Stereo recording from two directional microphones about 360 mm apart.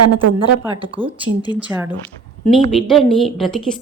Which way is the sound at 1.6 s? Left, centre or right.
Centre.